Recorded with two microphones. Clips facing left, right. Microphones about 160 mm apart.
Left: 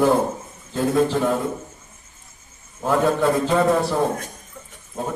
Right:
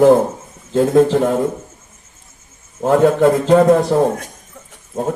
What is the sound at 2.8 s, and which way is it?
Mantra, 50° right (ahead or behind).